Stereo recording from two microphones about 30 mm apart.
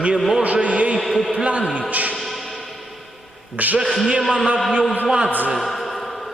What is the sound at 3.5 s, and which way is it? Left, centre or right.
Speech, right.